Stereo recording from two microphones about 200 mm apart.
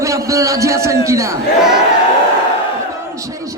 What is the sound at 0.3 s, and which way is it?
A man's voice, 15° right (ahead or behind).